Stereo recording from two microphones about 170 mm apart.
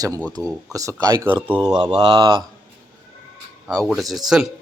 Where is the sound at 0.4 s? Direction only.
15° left (ahead or behind).